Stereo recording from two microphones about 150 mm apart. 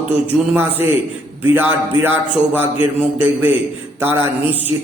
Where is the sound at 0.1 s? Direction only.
15° right (ahead or behind).